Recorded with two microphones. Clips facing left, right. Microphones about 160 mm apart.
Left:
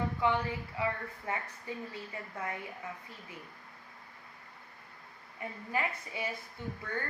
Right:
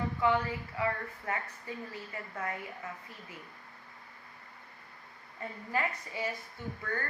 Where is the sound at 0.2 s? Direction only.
20° left (ahead or behind).